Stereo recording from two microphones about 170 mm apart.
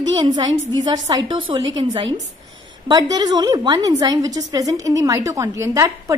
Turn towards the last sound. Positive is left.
turn(degrees=-20)  # may be behind; listen again after turning